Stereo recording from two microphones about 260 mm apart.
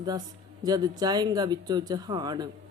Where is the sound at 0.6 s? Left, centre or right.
Centre.